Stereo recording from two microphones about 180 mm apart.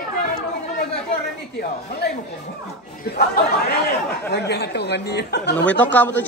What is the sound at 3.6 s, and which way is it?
Speech, 60° left (ahead or behind).